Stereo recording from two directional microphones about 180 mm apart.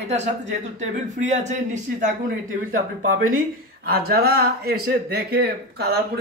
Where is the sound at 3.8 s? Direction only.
55° right (ahead or behind).